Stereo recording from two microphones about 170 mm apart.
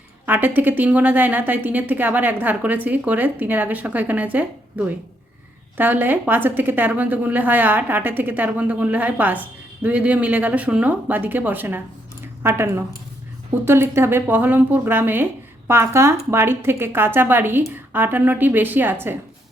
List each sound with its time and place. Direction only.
0.3 s a woman's voice: 10° right (ahead or behind)
12.2 s a sound: 15° right (ahead or behind)
13.7 s a woman's voice: 15° right (ahead or behind)